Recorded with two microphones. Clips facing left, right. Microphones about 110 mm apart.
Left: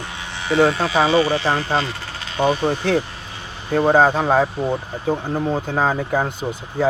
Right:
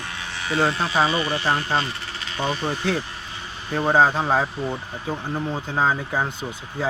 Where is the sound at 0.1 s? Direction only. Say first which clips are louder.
Left 5 dB; 20° left (ahead or behind).